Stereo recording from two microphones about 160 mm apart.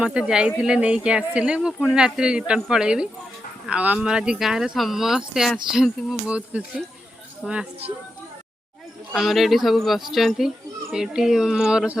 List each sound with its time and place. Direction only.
0.0 s speech: 5° right (ahead or behind)
9.1 s speech: centre (ahead or behind)